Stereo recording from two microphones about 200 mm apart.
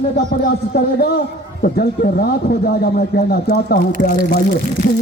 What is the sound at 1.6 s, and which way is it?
A man's voice, 50° left (ahead or behind).